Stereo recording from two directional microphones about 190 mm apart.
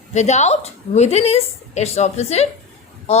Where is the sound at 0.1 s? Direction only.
35° left (ahead or behind).